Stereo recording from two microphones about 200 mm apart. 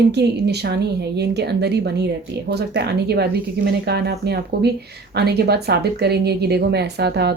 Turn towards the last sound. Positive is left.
turn(degrees=-55)  # may be behind; listen again after turning